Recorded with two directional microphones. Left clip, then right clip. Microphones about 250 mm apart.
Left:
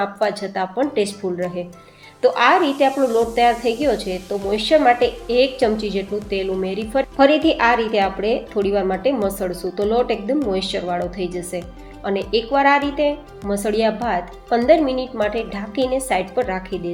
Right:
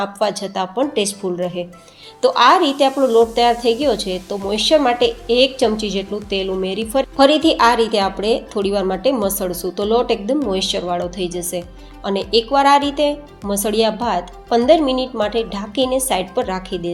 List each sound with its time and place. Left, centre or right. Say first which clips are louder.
0.0 s a woman's voice: right 1 dB; right